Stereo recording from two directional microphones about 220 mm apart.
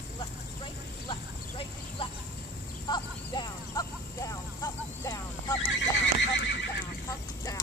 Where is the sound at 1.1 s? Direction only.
25° left (ahead or behind).